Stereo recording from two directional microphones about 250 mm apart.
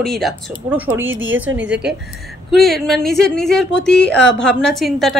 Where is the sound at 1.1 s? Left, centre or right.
Right.